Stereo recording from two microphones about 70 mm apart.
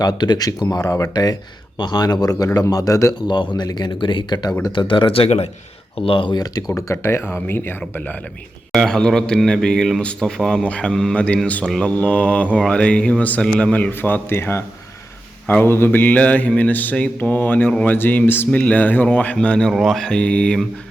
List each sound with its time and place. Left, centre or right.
0.0 s speech: left
0.8 s speech: left
1.1 s a man's voice: left
1.8 s speech: left
2.2 s a man's voice: left
3.2 s speech: left
6.3 s a man's voice: left
6.7 s speech: left
7.4 s speech: left
8.7 s a man's voice: centre
14.0 s a man's voice: left
19.6 s a man's voice: centre